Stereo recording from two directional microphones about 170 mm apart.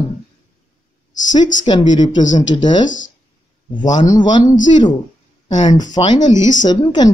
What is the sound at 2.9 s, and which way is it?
Speech, 90° left.